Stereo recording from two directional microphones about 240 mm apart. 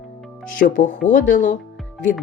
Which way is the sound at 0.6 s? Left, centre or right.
Left.